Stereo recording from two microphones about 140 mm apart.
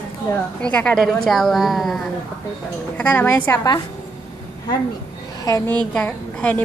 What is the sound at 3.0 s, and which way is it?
Speech, 10° left (ahead or behind).